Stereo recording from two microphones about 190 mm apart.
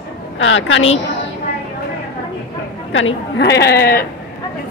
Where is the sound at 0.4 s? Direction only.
85° left.